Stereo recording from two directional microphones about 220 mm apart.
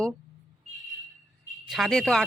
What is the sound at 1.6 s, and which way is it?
Speech, centre (ahead or behind).